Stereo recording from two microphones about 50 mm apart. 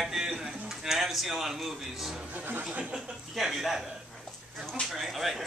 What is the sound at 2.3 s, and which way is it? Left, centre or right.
Chuckle, right.